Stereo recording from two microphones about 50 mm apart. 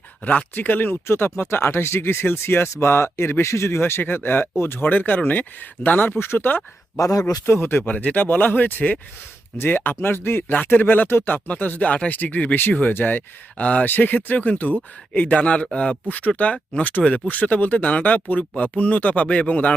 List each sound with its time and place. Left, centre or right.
0.3 s speech: left
1.0 s speech: left
2.7 s speech: left
4.1 s speech: left
4.5 s speech: left
4.8 s speech: left
6.1 s speech: left
7.9 s speech: left
10.5 s speech: left
13.6 s speech: left
13.8 s speech: left; by 16.0 s centre
16.0 s speech: left